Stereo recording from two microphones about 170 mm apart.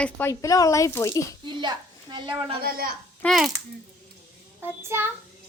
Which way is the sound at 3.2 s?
Centre (ahead or behind).